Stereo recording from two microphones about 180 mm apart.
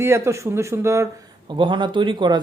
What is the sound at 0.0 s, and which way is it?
Speech, 15° right (ahead or behind).